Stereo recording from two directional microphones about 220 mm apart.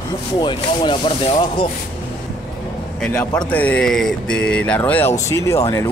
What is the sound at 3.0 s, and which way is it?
Speech, 5° left (ahead or behind).